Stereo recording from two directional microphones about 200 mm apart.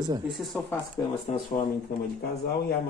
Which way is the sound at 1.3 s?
35° left (ahead or behind).